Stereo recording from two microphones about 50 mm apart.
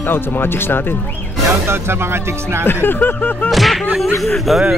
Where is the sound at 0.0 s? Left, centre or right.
Left.